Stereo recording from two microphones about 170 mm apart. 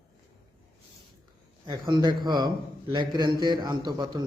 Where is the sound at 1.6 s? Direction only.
25° right (ahead or behind).